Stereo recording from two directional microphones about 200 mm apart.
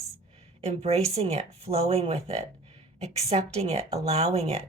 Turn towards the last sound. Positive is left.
turn(degrees=-30)  # may be behind; listen again after turning